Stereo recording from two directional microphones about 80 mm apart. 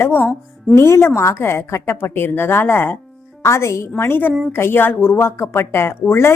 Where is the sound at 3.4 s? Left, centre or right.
Left.